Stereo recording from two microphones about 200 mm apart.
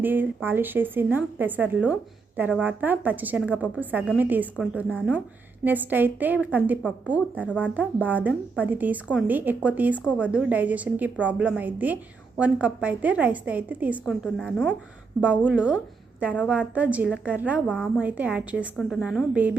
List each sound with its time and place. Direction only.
0.0 s a woman's voice: 10° right (ahead or behind)
7.4 s a woman's voice: 5° left (ahead or behind)
7.7 s a woman's voice: 5° right (ahead or behind)
17.7 s a woman's voice: 5° left (ahead or behind)
18.0 s a woman's voice: 5° right (ahead or behind)